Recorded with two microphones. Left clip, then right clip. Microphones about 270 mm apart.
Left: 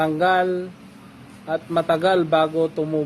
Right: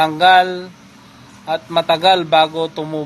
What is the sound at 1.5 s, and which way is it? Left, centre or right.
A man's voice, right.